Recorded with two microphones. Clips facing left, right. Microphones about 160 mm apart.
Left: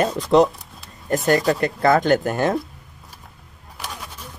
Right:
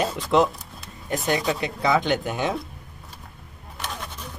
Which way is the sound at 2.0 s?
Centre (ahead or behind).